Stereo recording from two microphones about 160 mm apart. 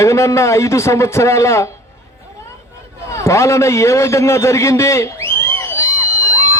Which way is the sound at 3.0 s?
20° left (ahead or behind).